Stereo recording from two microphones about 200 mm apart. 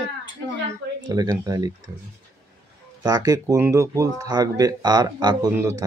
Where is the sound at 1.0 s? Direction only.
20° right (ahead or behind).